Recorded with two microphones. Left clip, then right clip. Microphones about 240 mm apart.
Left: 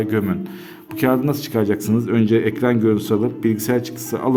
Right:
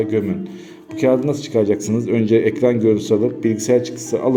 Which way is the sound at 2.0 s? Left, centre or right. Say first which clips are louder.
Right 3 dB; centre.